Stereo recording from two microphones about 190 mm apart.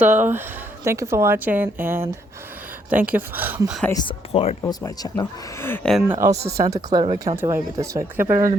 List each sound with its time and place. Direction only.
0.0 s a woman's voice: 10° right (ahead or behind)
3.8 s speech: 20° left (ahead or behind)
4.3 s speech: 30° left (ahead or behind)
4.6 s speech: 15° left (ahead or behind)
6.1 s a woman's voice: 15° right (ahead or behind)